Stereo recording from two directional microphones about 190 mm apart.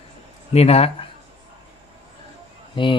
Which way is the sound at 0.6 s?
30° left (ahead or behind).